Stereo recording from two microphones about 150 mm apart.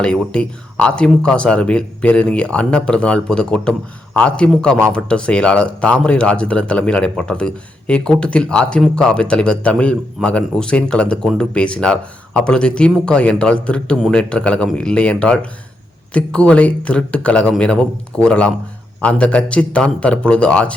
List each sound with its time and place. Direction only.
0.0 s speech: 5° left (ahead or behind)